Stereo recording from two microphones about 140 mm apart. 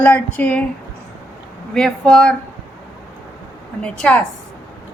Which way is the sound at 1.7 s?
5° left (ahead or behind).